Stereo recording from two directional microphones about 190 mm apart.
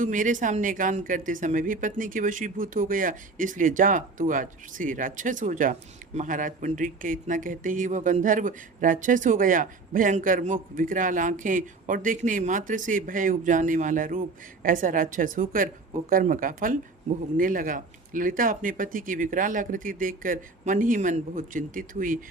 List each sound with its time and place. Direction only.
0.0 s speech: 45° right (ahead or behind)